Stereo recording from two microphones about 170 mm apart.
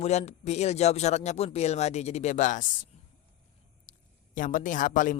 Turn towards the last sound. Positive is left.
turn(degrees=50)  # may be behind; listen again after turning